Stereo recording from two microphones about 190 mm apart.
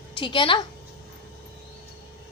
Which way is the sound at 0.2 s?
25° left (ahead or behind).